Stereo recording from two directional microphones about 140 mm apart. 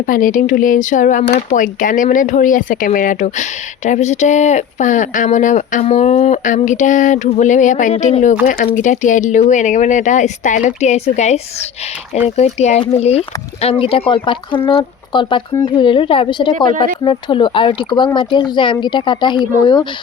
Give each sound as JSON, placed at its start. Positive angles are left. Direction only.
{"t": 0.1, "sound": "speech", "side_deg": 75}
{"t": 5.8, "sound": "speech", "side_deg": 50}
{"t": 8.4, "sound": "speech", "side_deg": 70}
{"t": 12.4, "sound": "speech", "side_deg": 50}